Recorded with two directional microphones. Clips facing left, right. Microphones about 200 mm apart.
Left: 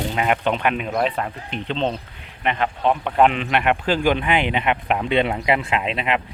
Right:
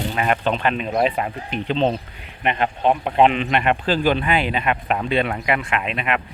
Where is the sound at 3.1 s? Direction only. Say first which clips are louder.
Right 1 dB; 5° right (ahead or behind).